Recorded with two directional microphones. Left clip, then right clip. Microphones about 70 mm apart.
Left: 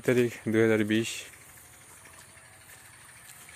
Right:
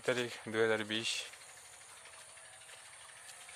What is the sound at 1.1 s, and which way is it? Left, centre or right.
Speech, right.